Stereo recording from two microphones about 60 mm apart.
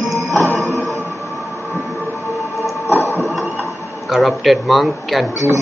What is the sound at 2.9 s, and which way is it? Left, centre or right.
Music, left.